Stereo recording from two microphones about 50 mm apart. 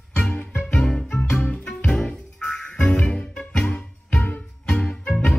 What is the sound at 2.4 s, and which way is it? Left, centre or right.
Music, centre.